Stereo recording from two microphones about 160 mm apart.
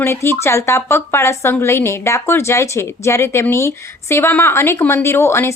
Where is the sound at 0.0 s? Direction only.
15° left (ahead or behind).